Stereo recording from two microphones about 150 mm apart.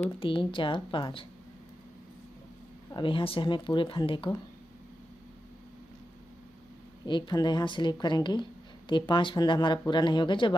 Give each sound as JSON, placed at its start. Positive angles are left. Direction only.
{"t": 0.2, "sound": "speech", "side_deg": 35}
{"t": 2.9, "sound": "speech", "side_deg": 35}
{"t": 7.1, "sound": "speech", "side_deg": 30}